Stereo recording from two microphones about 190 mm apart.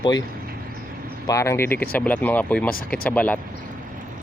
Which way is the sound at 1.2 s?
15° left (ahead or behind).